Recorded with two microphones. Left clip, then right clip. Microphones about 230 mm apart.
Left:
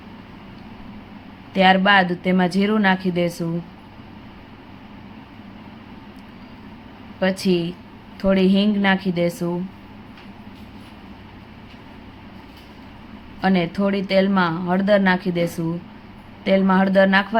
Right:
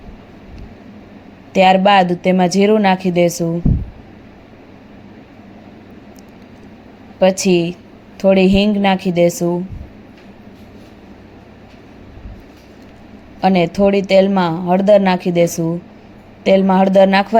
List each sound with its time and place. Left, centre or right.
1.5 s a woman's voice: centre
7.2 s speech: centre
13.4 s speech: centre